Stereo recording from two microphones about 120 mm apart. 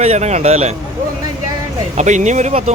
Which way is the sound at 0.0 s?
65° right (ahead or behind).